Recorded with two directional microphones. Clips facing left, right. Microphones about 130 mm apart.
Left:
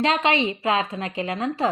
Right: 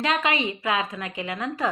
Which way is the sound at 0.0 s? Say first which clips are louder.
Left 3 dB; 30° left (ahead or behind).